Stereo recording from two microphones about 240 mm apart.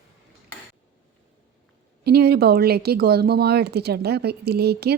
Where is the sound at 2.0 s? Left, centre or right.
Right.